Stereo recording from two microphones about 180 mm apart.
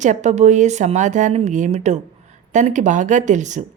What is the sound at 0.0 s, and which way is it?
A woman's voice, 40° right (ahead or behind).